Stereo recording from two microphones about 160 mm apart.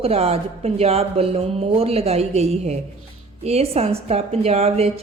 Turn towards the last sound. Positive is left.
turn(degrees=-40)  # may be behind; listen again after turning